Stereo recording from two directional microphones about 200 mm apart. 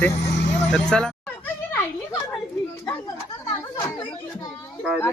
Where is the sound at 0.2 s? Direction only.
55° left (ahead or behind).